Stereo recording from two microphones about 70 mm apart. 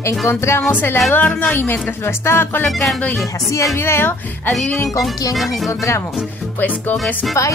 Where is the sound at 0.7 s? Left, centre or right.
Left.